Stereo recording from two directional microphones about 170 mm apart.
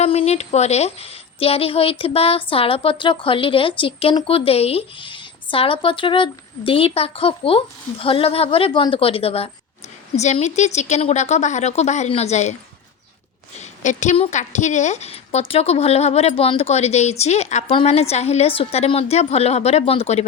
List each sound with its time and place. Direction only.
0.0 s a woman's voice: 35° left (ahead or behind)
13.6 s a woman's voice: 45° left (ahead or behind)